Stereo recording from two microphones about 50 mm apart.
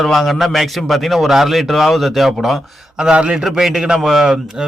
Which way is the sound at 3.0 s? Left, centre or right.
Centre.